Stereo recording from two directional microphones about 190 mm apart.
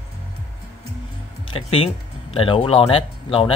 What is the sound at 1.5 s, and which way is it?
Speech, 30° left (ahead or behind).